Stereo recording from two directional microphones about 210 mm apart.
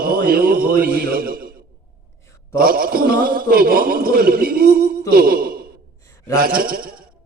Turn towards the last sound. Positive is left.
turn(degrees=-45)  # may be behind; listen again after turning